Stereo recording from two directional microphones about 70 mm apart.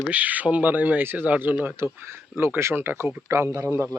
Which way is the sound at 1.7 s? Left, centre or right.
Right.